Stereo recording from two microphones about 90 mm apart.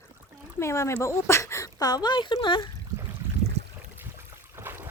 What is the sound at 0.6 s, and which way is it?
Speech, 30° left (ahead or behind).